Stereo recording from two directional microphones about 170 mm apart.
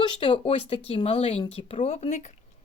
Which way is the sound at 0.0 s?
30° left (ahead or behind).